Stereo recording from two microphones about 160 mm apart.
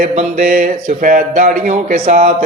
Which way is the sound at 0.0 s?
50° right (ahead or behind).